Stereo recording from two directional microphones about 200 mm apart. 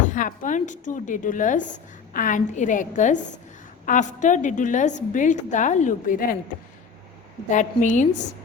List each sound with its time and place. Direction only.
0.0 s a woman's voice: 40° left (ahead or behind)
7.5 s a woman's voice: 40° left (ahead or behind)